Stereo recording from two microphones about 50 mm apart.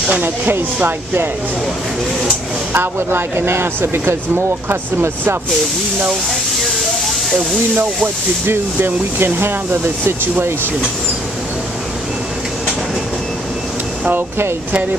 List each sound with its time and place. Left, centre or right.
0.2 s speech: right
2.7 s speech: right
7.7 s speech: right
8.5 s speech: right